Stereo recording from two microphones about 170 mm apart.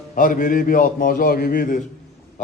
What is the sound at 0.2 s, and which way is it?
A man's voice, 50° left (ahead or behind).